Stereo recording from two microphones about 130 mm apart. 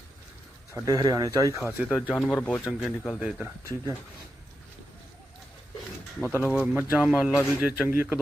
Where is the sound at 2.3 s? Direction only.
10° left (ahead or behind).